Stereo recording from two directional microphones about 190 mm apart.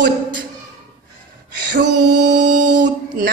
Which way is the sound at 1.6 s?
65° right (ahead or behind).